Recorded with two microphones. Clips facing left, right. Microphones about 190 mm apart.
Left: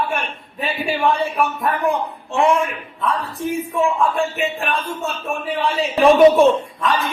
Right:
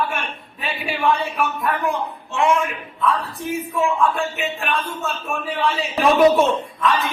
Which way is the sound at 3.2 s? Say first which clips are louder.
Left 3 dB; centre (ahead or behind).